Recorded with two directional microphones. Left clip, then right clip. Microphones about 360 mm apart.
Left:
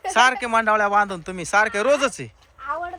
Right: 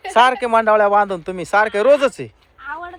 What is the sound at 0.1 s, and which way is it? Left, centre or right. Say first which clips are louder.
Speech: right 4 dB; centre.